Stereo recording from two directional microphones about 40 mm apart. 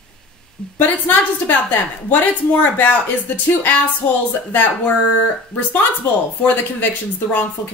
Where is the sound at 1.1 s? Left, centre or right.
Left.